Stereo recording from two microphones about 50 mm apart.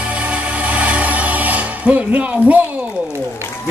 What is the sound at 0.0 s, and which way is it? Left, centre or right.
Music, right.